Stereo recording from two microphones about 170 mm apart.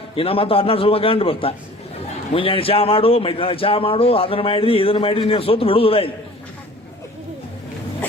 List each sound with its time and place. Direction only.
0.2 s a man's voice: 35° left (ahead or behind)